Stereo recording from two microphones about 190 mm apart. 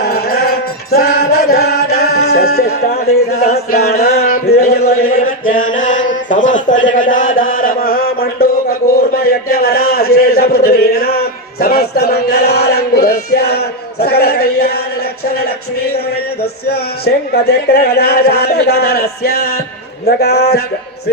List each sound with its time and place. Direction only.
0.0 s music: 55° left (ahead or behind)
4.5 s mantra: 55° left (ahead or behind)
5.1 s chant: 45° left (ahead or behind)
5.7 s mantra: 40° left (ahead or behind)
9.0 s a man's voice: 55° left (ahead or behind)
16.6 s a man's voice: 55° left (ahead or behind)